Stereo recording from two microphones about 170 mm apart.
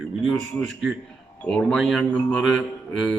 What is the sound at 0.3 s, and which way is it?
Speech, 5° left (ahead or behind).